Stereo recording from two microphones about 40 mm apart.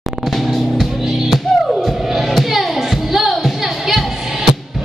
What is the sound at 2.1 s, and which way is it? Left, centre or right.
Music, centre.